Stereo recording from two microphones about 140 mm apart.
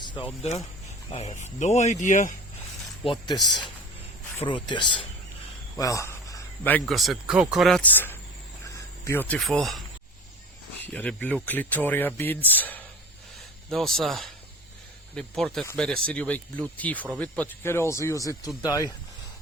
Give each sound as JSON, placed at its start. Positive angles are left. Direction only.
{"t": 1.1, "sound": "speech", "side_deg": 45}
{"t": 3.0, "sound": "speech", "side_deg": 35}
{"t": 5.7, "sound": "a sound", "side_deg": 20}
{"t": 6.8, "sound": "speech", "side_deg": 0}
{"t": 7.8, "sound": "speech", "side_deg": 15}
{"t": 8.6, "sound": "cricket", "side_deg": 20}
{"t": 9.3, "sound": "speech", "side_deg": 0}
{"t": 10.9, "sound": "speech", "side_deg": 10}
{"t": 13.7, "sound": "speech", "side_deg": 0}